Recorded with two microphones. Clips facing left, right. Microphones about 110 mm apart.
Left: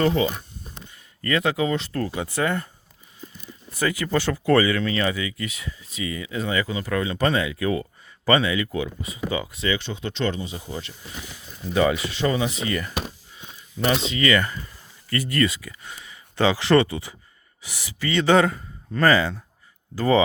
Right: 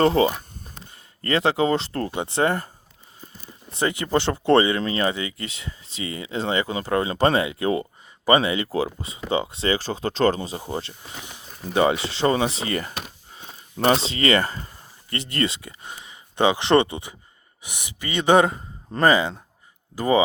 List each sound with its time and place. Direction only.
0.0 s speech: 35° right (ahead or behind)
0.7 s a sound: 35° right (ahead or behind)
2.0 s speech: 25° right (ahead or behind)
3.7 s speech: 25° right (ahead or behind)